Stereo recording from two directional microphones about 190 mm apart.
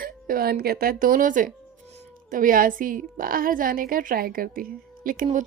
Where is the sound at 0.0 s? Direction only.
50° right (ahead or behind).